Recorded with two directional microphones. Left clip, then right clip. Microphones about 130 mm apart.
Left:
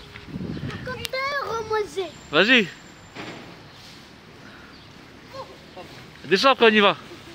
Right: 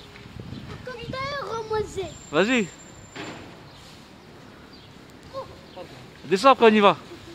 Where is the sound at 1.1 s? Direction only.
5° left (ahead or behind).